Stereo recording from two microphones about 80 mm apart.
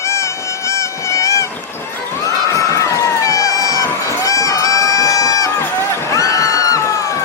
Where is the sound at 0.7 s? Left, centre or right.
Left.